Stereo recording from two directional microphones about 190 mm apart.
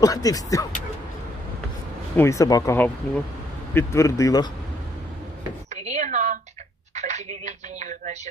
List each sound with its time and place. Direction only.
0.0 s speech: 20° left (ahead or behind)
2.1 s speech: 15° left (ahead or behind)
5.9 s a sound: 40° right (ahead or behind)
7.0 s speech: 35° right (ahead or behind)